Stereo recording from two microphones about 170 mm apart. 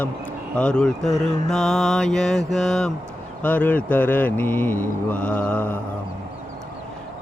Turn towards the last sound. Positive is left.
turn(degrees=10)  # may be behind; listen again after turning